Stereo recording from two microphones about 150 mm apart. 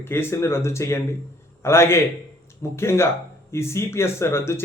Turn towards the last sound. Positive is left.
turn(degrees=15)  # may be behind; listen again after turning